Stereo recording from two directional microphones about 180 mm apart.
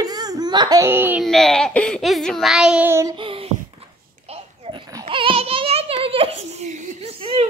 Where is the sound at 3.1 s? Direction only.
30° right (ahead or behind).